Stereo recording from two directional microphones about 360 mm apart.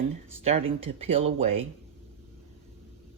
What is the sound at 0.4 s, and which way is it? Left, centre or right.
Speech, centre.